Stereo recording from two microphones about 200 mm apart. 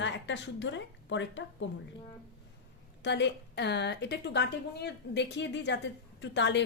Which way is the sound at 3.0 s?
60° left (ahead or behind).